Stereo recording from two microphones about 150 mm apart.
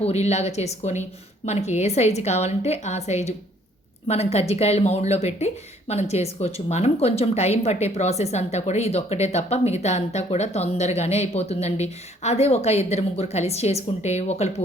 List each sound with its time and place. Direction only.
0.0 s speech: 45° left (ahead or behind)